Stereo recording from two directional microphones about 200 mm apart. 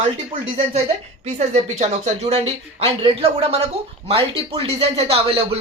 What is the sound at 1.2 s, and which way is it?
A woman's voice, 35° right (ahead or behind).